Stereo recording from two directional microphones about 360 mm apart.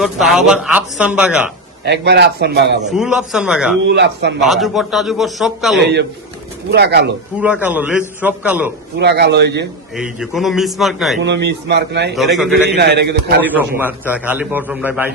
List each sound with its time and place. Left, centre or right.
0.0 s speech: centre
1.8 s a man's voice: right
2.9 s speech: centre
3.8 s a man's voice: right
4.4 s speech: centre
5.8 s a man's voice: right
7.3 s speech: centre
9.0 s a man's voice: right
10.0 s speech: centre
11.2 s a man's voice: right
12.1 s speech: centre
12.7 s a man's voice: right
13.7 s speech: centre